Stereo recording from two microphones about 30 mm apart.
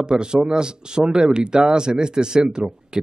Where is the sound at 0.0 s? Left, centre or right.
Right.